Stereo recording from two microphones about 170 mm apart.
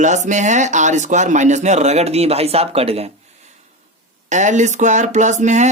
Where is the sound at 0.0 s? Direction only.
45° right (ahead or behind).